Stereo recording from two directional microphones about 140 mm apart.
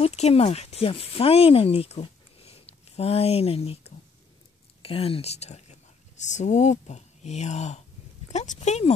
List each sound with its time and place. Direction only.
0.0 s speech: 50° left (ahead or behind)